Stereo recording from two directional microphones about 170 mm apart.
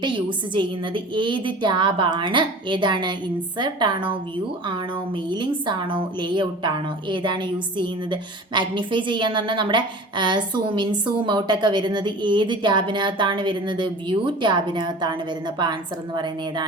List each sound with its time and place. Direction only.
0.0 s a woman's voice: 30° right (ahead or behind)